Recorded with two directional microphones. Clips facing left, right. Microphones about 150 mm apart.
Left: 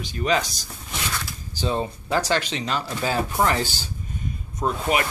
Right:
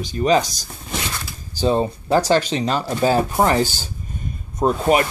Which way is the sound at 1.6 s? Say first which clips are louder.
Right 7 dB; 35° right (ahead or behind).